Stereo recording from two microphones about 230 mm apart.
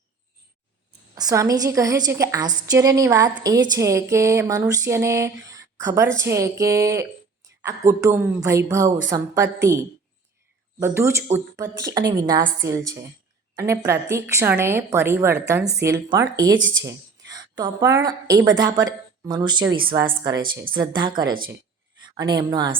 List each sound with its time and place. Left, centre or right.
1.1 s a woman's voice: centre